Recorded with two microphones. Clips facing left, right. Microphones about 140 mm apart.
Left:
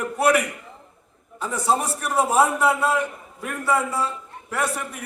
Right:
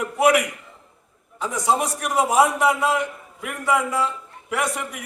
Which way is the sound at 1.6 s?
15° right (ahead or behind).